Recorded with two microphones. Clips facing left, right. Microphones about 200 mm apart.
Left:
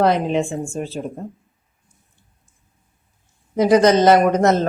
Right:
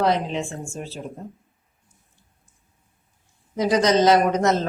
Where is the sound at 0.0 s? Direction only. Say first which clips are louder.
Left 5 dB; 55° left (ahead or behind).